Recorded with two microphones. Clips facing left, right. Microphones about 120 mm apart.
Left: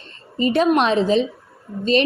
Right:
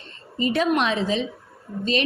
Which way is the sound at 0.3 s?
30° left (ahead or behind).